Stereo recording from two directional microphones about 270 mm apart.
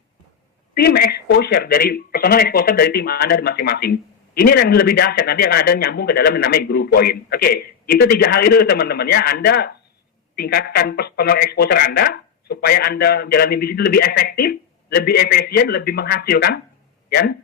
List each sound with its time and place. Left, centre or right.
0.8 s speech: left